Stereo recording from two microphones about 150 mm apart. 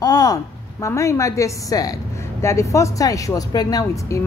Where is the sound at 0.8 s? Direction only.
20° left (ahead or behind).